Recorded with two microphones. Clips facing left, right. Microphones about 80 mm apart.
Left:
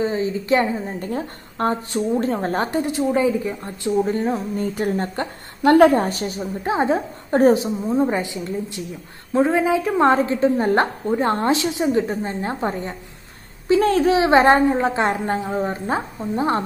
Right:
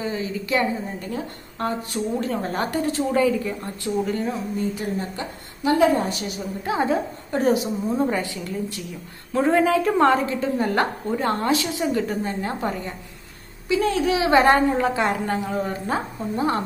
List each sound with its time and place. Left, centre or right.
0.0 s a woman's voice: left
4.0 s a woman's voice: left
6.4 s a woman's voice: left
7.2 s a woman's voice: left
9.5 s a woman's voice: centre
10.0 s a woman's voice: left
13.7 s a woman's voice: left